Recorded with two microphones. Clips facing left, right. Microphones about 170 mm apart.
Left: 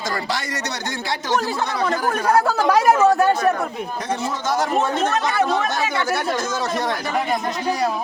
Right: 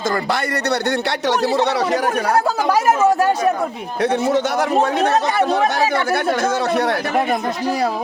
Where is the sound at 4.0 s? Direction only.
65° right (ahead or behind).